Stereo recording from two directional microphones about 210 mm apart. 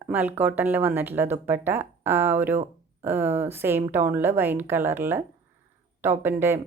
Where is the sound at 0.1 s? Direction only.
10° right (ahead or behind).